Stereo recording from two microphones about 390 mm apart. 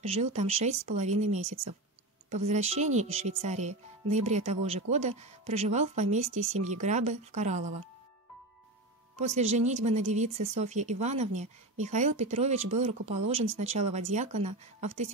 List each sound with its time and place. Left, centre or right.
0.0 s speech: centre
9.2 s speech: centre